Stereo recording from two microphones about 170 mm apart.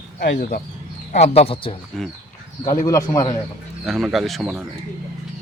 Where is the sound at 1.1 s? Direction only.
40° left (ahead or behind).